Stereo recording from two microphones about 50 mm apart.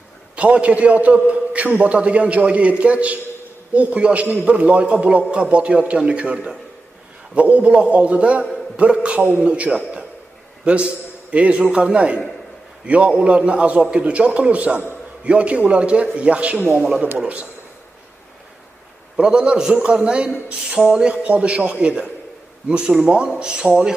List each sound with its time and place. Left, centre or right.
0.4 s a man's voice: right
19.1 s a man's voice: centre